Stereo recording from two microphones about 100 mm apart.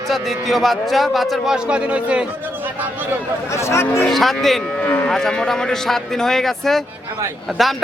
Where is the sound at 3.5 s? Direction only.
30° left (ahead or behind).